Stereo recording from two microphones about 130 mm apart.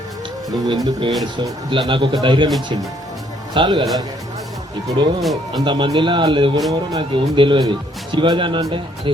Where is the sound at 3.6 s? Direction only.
40° right (ahead or behind).